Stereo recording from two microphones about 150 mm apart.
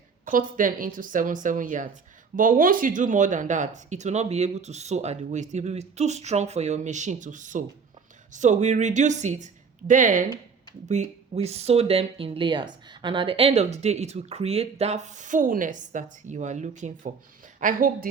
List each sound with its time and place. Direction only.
0.3 s speech: 65° right (ahead or behind)
10.8 s speech: 50° right (ahead or behind)
17.6 s a woman's voice: 65° right (ahead or behind)